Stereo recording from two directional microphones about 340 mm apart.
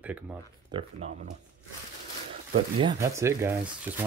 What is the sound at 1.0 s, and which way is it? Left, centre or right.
Speech, right.